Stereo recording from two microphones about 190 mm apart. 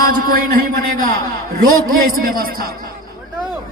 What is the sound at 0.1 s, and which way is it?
A man's voice, 45° right (ahead or behind).